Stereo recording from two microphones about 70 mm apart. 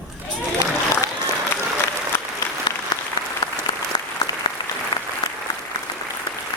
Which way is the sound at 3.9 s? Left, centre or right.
Left.